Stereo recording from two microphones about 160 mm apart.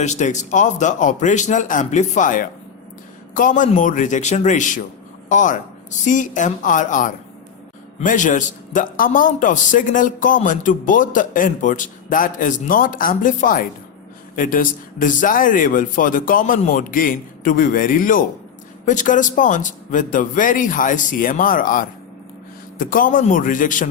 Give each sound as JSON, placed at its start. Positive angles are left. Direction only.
{"t": 0.0, "sound": "a man's voice", "side_deg": 50}